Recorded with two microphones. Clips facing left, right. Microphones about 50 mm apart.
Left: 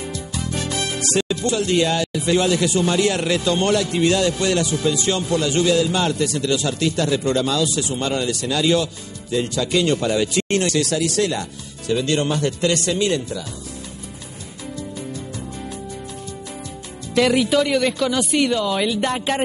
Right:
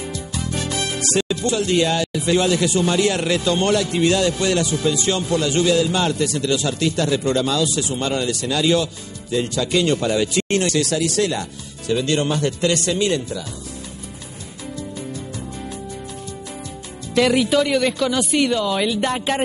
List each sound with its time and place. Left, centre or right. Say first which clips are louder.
0.0 s speech: even; right
17.1 s speech: even; right